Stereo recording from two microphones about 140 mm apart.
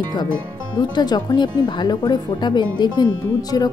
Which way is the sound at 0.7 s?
30° left (ahead or behind).